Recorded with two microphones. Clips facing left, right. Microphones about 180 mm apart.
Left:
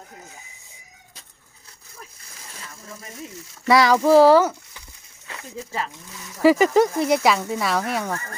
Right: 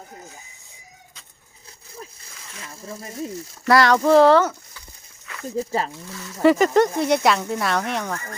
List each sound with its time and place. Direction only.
2.6 s speech: 30° right (ahead or behind)
3.7 s speech: centre (ahead or behind)
5.5 s speech: 35° right (ahead or behind)
6.4 s speech: 5° left (ahead or behind)